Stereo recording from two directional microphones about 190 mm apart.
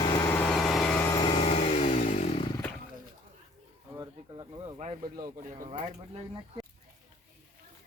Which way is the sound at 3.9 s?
20° right (ahead or behind).